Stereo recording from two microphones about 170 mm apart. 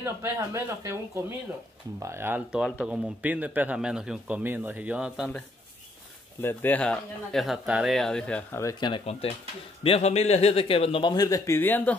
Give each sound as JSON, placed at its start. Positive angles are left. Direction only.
{"t": 0.0, "sound": "speech", "side_deg": -15}
{"t": 6.4, "sound": "a man's voice", "side_deg": 10}